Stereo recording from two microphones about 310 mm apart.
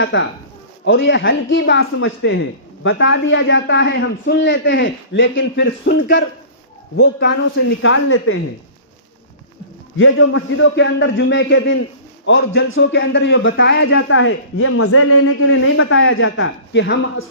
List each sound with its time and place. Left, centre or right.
0.0 s speech: left
10.0 s speech: left